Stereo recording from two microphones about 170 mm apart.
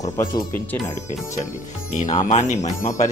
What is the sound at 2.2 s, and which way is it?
Speech, 45° left (ahead or behind).